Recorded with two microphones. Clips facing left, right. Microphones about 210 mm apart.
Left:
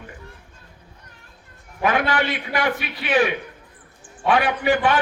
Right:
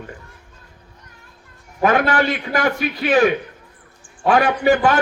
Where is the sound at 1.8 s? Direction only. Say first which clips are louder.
Right 4 dB; 45° right (ahead or behind).